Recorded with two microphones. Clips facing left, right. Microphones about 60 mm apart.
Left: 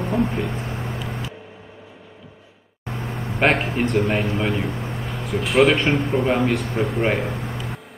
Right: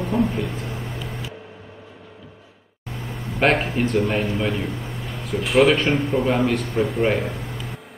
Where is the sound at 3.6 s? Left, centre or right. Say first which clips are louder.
Even; centre.